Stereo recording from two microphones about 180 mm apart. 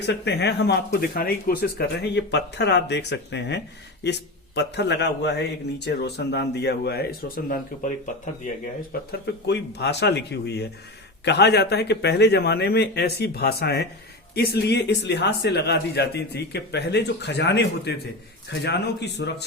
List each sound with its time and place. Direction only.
0.0 s speech: 70° left (ahead or behind); by 7.9 s 50° left (ahead or behind)
9.2 s a man's voice: 65° left (ahead or behind)